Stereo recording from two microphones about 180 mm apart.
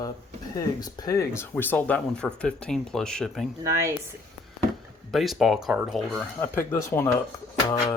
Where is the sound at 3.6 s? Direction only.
15° right (ahead or behind).